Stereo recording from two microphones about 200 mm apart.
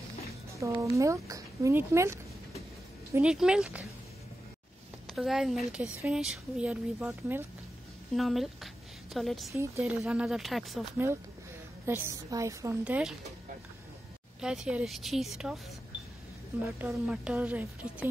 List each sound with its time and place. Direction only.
0.6 s speech: 15° right (ahead or behind)
3.2 s speech: 5° right (ahead or behind)
5.0 s speech: centre (ahead or behind)
11.8 s a woman's voice: 15° right (ahead or behind)
14.4 s speech: 5° right (ahead or behind)
16.6 s a woman's voice: 5° right (ahead or behind)